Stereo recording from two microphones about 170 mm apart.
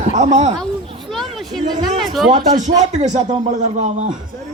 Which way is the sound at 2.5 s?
40° right (ahead or behind).